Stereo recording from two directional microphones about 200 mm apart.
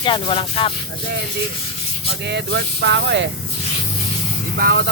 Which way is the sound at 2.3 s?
55° right (ahead or behind).